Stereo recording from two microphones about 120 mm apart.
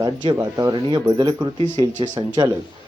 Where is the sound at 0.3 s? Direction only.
30° right (ahead or behind).